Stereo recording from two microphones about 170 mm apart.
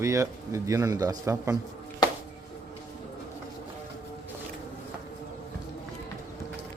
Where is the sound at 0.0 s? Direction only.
20° right (ahead or behind).